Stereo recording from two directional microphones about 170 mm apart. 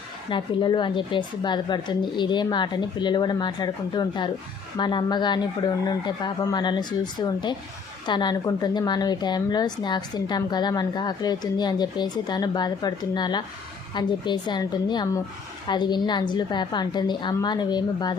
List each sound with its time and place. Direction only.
0.3 s a woman's voice: 25° left (ahead or behind)